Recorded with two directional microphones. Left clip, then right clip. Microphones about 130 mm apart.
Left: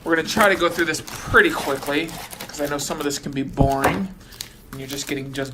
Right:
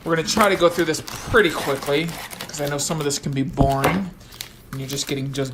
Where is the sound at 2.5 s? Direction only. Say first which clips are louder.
Even; 60° right (ahead or behind).